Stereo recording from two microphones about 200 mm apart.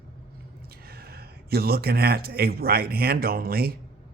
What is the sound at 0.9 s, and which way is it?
A man's voice, 50° right (ahead or behind).